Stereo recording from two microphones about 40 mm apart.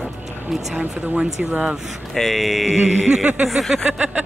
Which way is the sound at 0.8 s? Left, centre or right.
Right.